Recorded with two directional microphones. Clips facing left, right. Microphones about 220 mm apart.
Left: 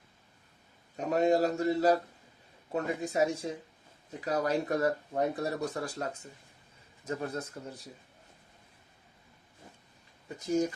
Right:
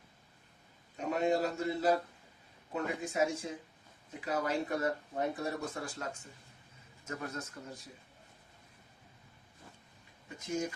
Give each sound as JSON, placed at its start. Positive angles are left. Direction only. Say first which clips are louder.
{"t": 0.9, "sound": "a man's voice", "louder": "left 5 dB", "side_deg": 40}
{"t": 10.2, "sound": "speech", "louder": "left 7 dB", "side_deg": 35}